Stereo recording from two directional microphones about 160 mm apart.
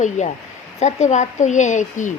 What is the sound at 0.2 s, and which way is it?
A woman's voice, 45° left (ahead or behind).